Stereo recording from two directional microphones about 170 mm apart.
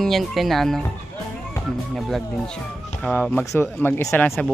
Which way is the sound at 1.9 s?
Centre (ahead or behind).